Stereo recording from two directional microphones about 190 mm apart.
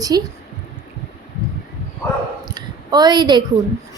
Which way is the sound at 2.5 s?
20° right (ahead or behind).